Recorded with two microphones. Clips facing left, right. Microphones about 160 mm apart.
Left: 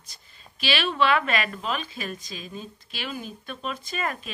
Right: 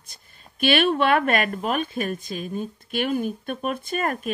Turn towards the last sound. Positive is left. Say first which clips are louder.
# right 5 dB
turn(degrees=-50)  # may be behind; listen again after turning